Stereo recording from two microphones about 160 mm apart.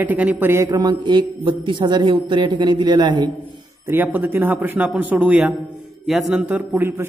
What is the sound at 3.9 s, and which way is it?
A man's voice, 10° right (ahead or behind).